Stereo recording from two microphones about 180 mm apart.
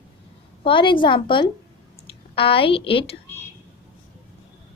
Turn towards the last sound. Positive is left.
turn(degrees=30)  # may be behind; listen again after turning